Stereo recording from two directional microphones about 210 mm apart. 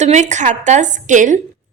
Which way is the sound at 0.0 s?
35° right (ahead or behind).